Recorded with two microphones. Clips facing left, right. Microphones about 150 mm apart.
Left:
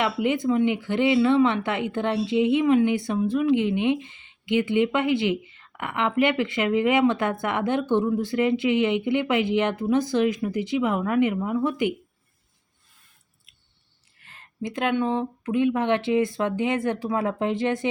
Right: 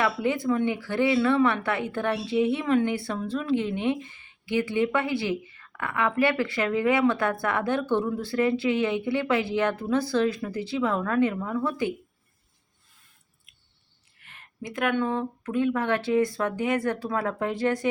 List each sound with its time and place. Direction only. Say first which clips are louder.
0.0 s speech: left 2 dB; 20° left (ahead or behind)
14.2 s a sound: left 7 dB; 30° left (ahead or behind)
14.9 s speech: left 2 dB; 20° left (ahead or behind)